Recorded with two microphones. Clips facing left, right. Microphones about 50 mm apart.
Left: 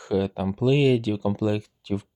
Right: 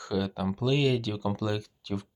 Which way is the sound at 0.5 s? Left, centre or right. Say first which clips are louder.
Left 7 dB; centre.